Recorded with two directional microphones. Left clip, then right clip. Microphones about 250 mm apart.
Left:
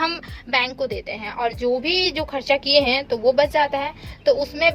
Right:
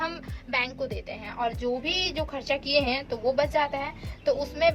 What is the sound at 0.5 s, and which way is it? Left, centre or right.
Speech, left.